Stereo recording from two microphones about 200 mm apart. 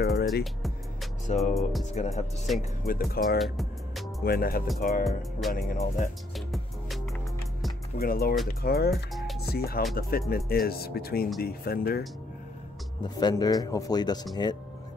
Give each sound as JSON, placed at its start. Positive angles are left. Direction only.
{"t": 0.0, "sound": "music", "side_deg": 50}
{"t": 0.4, "sound": "speech", "side_deg": 0}
{"t": 1.2, "sound": "music", "side_deg": 35}
{"t": 1.5, "sound": "speech", "side_deg": 0}
{"t": 2.0, "sound": "speech", "side_deg": 35}
{"t": 2.8, "sound": "speech", "side_deg": 50}
{"t": 3.3, "sound": "music", "side_deg": 0}
{"t": 4.2, "sound": "speech", "side_deg": 50}
{"t": 6.3, "sound": "music", "side_deg": 0}
{"t": 8.0, "sound": "speech", "side_deg": 50}
{"t": 13.0, "sound": "speech", "side_deg": 20}